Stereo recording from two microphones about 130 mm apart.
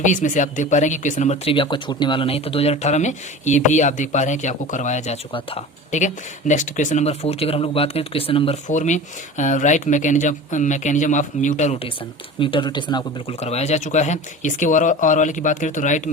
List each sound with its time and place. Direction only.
0.0 s speech: 75° left (ahead or behind); by 8.5 s 45° left (ahead or behind)
8.6 s speech: 70° left (ahead or behind)
12.4 s speech: 40° left (ahead or behind)
13.4 s speech: 55° left (ahead or behind); by 16.0 s 70° left (ahead or behind)